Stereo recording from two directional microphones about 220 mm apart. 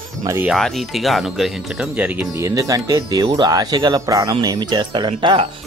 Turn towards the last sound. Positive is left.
turn(degrees=-20)  # may be behind; listen again after turning